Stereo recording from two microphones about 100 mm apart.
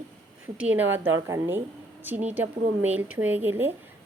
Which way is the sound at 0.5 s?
15° right (ahead or behind).